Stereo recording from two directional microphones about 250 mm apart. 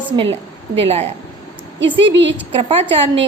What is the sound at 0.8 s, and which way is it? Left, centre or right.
A woman's voice, right.